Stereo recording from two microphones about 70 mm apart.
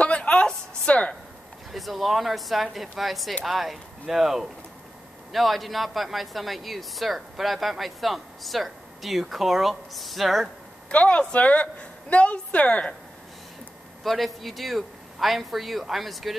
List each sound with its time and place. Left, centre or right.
0.0 s a sound: centre
1.7 s speech: centre
10.9 s a woman's voice: centre
14.0 s speech: centre